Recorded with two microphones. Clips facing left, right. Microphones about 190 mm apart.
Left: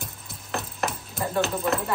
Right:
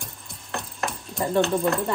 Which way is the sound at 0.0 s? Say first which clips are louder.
Left 2 dB; 5° left (ahead or behind).